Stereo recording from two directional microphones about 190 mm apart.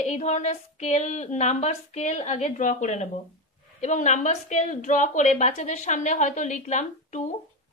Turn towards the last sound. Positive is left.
turn(degrees=40)  # may be behind; listen again after turning